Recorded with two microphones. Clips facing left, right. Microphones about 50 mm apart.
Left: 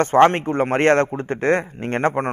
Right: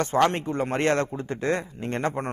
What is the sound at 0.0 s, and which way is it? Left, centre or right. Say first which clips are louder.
A man's voice: left 8 dB; left.